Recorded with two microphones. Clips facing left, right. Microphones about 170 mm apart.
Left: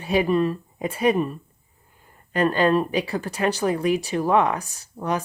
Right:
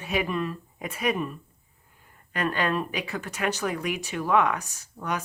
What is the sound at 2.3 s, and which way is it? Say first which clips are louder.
A woman's voice: left 7 dB; 30° left (ahead or behind).